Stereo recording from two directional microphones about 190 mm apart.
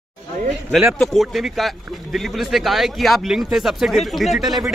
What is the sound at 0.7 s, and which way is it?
A man's voice, centre (ahead or behind).